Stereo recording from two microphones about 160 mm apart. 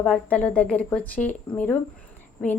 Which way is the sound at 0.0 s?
10° left (ahead or behind).